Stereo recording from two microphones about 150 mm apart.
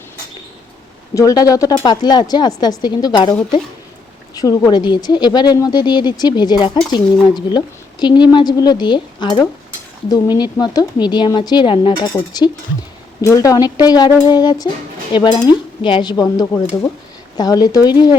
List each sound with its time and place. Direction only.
1.1 s speech: 25° left (ahead or behind)
4.4 s speech: 25° left (ahead or behind)